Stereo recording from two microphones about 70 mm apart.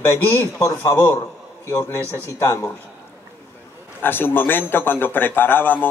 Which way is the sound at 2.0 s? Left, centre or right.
Left.